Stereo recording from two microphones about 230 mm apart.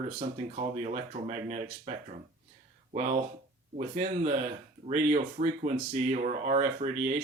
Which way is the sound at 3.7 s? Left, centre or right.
Right.